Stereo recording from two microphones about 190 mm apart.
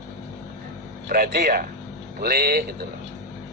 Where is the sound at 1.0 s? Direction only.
50° right (ahead or behind).